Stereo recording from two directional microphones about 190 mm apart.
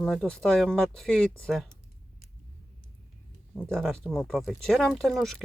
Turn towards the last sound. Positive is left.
turn(degrees=0)  # may be behind; listen again after turning